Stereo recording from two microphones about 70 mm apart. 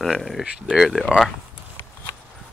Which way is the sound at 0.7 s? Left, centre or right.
Centre.